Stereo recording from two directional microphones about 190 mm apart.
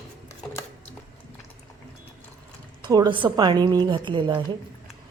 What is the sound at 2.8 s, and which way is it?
Speech, 20° right (ahead or behind).